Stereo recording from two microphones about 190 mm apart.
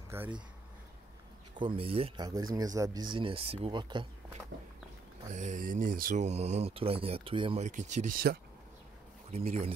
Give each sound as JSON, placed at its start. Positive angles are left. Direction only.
{"t": 0.1, "sound": "speech", "side_deg": -10}
{"t": 1.6, "sound": "speech", "side_deg": -30}
{"t": 5.3, "sound": "speech", "side_deg": -40}
{"t": 9.3, "sound": "speech", "side_deg": -35}